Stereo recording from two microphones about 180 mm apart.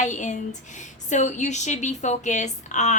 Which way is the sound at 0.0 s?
40° left (ahead or behind).